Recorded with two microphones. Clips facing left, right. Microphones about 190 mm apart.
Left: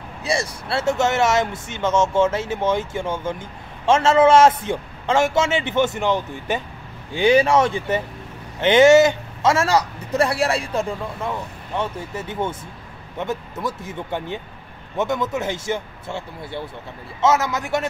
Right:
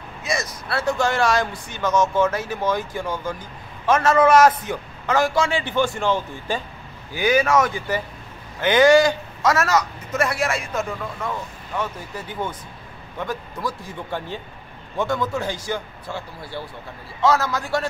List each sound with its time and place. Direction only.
0.2 s a man's voice: 30° left (ahead or behind)